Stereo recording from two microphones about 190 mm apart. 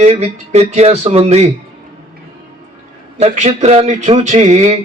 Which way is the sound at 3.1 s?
35° right (ahead or behind).